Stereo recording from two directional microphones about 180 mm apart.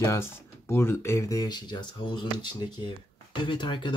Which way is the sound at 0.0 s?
15° left (ahead or behind).